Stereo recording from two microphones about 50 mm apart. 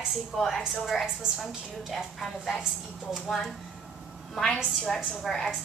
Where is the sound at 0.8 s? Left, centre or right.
Centre.